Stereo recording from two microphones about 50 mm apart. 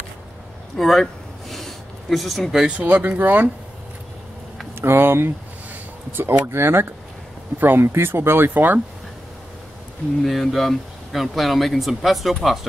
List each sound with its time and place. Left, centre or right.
0.7 s speech: centre
1.5 s a sound: centre
2.8 s speech: right
4.7 s speech: right
7.5 s speech: right
7.9 s speech: right
10.2 s speech: centre